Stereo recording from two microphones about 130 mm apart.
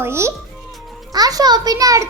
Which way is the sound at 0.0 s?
20° right (ahead or behind).